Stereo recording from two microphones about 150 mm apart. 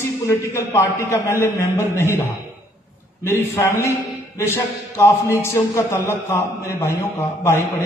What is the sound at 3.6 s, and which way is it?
A man's voice, 20° left (ahead or behind).